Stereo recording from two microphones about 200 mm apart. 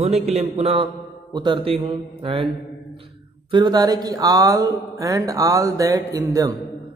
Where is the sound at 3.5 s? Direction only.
20° right (ahead or behind).